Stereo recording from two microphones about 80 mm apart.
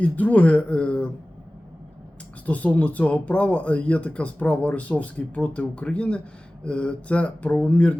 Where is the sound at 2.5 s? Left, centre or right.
Centre.